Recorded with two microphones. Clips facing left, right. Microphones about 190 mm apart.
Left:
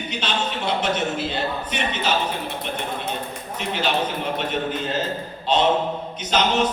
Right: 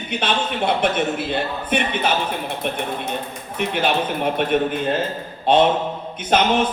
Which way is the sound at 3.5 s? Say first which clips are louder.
Right 3 dB; 55° right (ahead or behind).